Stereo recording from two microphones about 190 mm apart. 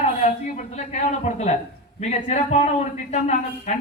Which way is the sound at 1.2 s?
40° left (ahead or behind).